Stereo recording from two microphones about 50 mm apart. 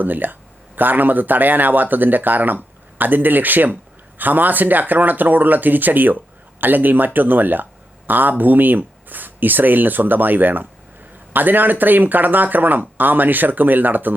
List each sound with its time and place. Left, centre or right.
0.0 s speech: right